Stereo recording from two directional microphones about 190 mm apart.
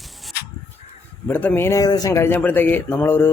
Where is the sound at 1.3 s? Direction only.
10° left (ahead or behind).